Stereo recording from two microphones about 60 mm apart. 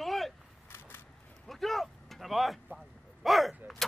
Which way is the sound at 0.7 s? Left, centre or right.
Left.